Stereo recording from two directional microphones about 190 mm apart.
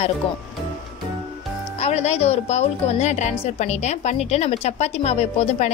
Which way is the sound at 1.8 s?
35° left (ahead or behind).